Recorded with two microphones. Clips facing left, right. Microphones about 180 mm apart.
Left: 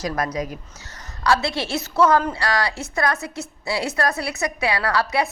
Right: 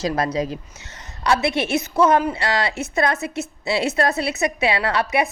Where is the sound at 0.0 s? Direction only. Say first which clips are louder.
Right 3 dB; 25° right (ahead or behind).